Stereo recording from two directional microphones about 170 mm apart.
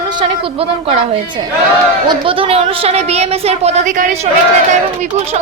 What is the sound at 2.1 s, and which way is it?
A woman's voice, 30° right (ahead or behind).